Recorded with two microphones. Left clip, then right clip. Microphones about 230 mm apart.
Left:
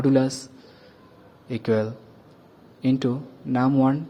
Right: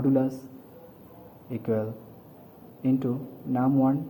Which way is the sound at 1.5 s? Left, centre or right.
Left.